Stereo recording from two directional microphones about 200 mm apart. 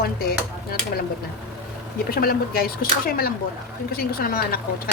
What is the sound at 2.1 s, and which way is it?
Speech, 50° left (ahead or behind).